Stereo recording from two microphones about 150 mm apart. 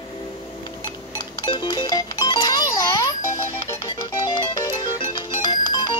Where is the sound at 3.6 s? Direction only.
30° left (ahead or behind).